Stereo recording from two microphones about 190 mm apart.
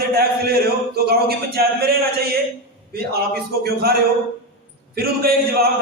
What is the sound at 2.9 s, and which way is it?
A man's voice, 55° right (ahead or behind).